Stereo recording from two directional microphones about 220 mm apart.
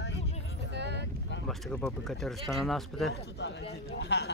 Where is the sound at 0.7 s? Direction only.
50° right (ahead or behind).